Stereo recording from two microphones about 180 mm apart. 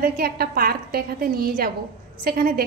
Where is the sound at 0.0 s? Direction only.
55° right (ahead or behind).